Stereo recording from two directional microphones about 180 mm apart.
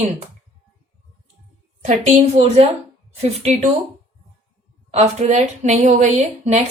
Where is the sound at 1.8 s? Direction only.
40° right (ahead or behind).